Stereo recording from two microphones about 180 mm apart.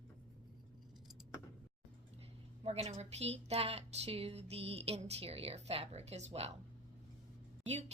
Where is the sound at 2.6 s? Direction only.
35° right (ahead or behind).